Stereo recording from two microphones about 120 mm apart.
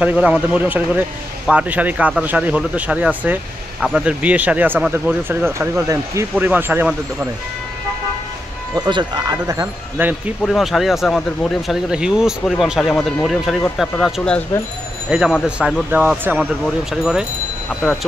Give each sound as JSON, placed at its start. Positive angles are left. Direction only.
{"t": 0.0, "sound": "speech", "side_deg": -10}
{"t": 8.7, "sound": "speech", "side_deg": -35}
{"t": 9.9, "sound": "speech", "side_deg": -15}
{"t": 10.4, "sound": "speech", "side_deg": 5}
{"t": 15.0, "sound": "speech", "side_deg": -5}
{"t": 16.6, "sound": "speech", "side_deg": -5}